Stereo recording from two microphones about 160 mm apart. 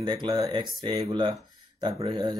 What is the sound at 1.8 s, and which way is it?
Speech, 30° right (ahead or behind).